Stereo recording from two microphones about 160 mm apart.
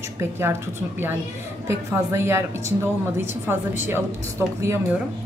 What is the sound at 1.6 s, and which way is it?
A woman's voice, 15° right (ahead or behind).